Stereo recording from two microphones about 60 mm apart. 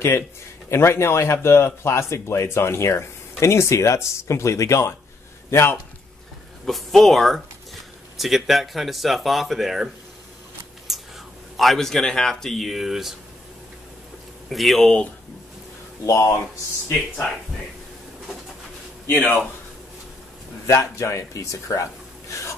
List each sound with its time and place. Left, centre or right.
0.7 s speech: left
5.5 s a man's voice: left
6.6 s speech: centre
10.9 s whispering: centre
11.5 s speech: centre
14.5 s speech: centre
16.1 s speech: left
19.1 s speech: left
20.6 s speech: left